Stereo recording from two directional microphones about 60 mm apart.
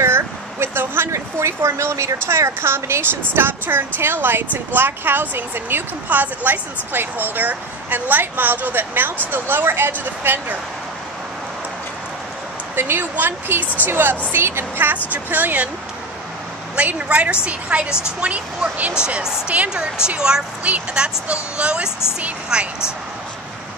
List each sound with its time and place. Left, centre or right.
0.0 s a sound: right
2.2 s a woman's voice: right
12.7 s a woman's voice: right
16.7 s speech: right